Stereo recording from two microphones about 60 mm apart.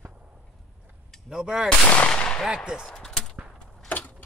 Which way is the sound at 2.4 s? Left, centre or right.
Centre.